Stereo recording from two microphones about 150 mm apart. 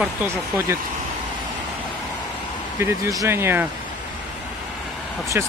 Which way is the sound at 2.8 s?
20° right (ahead or behind).